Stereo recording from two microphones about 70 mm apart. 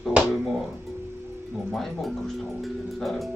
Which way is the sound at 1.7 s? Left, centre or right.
Centre.